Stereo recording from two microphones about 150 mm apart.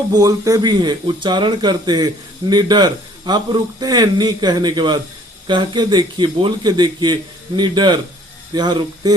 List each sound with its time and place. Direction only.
0.1 s a man's voice: 25° right (ahead or behind)